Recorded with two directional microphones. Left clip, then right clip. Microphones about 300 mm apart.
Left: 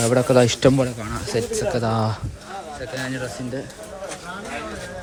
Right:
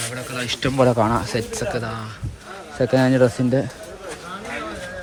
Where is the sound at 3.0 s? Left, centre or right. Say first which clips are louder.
Right 12 dB; centre.